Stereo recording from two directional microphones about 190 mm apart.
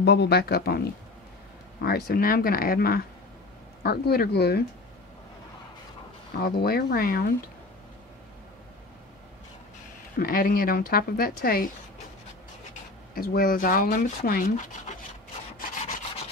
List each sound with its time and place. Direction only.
0.0 s speech: 65° left (ahead or behind)
6.3 s speech: 55° left (ahead or behind)
10.1 s speech: 50° left (ahead or behind)
13.1 s speech: 50° left (ahead or behind)